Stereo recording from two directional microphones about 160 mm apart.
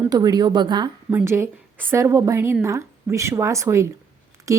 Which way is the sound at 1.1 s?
15° right (ahead or behind).